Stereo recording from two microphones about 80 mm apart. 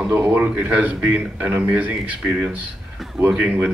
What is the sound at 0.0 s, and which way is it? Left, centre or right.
A man's voice, centre.